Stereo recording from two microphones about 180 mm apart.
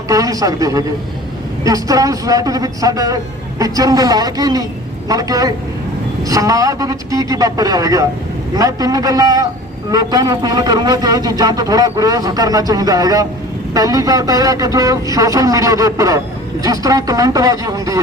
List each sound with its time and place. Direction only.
0.1 s a man's voice: 20° right (ahead or behind)